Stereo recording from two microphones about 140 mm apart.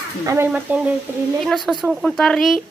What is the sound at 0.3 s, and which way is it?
Speech, 20° right (ahead or behind).